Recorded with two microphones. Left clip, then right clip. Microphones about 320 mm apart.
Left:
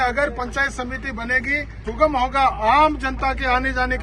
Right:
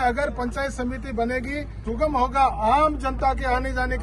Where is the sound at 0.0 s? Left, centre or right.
Centre.